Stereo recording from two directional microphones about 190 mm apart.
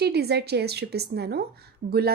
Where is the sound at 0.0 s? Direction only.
60° right (ahead or behind).